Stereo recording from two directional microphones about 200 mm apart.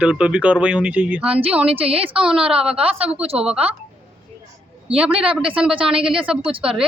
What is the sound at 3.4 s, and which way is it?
Speech, 5° right (ahead or behind).